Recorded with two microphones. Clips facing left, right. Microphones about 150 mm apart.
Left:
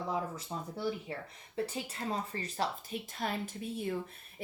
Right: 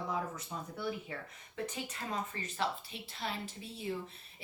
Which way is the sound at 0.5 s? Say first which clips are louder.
Left 4 dB; 30° left (ahead or behind).